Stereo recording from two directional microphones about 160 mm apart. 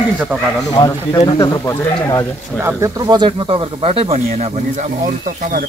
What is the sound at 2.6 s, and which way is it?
Speech, 20° right (ahead or behind).